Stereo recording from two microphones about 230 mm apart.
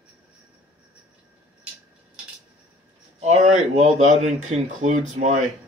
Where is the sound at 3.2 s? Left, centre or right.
Right.